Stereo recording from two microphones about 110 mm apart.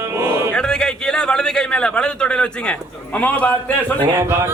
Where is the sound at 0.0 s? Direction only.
25° right (ahead or behind).